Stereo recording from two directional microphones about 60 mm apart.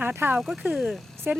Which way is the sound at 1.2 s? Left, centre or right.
Right.